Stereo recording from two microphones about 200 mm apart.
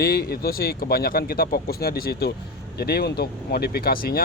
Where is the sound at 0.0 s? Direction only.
50° left (ahead or behind).